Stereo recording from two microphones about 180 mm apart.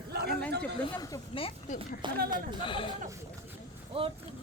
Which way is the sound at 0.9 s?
25° left (ahead or behind).